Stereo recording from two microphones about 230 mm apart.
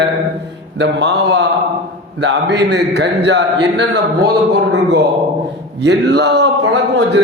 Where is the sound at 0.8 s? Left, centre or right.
Right.